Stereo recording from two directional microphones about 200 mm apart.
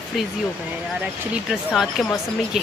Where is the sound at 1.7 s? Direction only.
Centre (ahead or behind).